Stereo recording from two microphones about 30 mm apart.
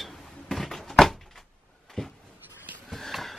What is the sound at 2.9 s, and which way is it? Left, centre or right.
Sniff, centre.